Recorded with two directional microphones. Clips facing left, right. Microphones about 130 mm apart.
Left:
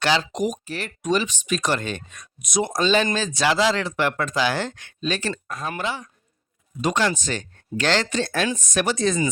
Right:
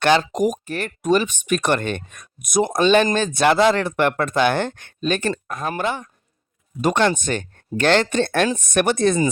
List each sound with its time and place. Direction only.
0.0 s speech: 55° right (ahead or behind)